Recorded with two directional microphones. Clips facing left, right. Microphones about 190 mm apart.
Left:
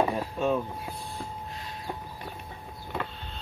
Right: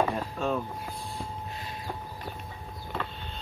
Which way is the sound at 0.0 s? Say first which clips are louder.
Left 2 dB; 10° left (ahead or behind).